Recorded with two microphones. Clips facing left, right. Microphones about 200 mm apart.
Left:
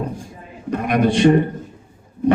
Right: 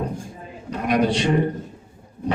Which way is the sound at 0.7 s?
55° left (ahead or behind).